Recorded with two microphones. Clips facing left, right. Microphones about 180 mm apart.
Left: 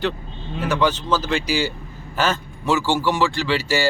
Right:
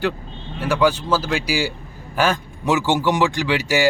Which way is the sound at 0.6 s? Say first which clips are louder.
Right 2 dB; 10° right (ahead or behind).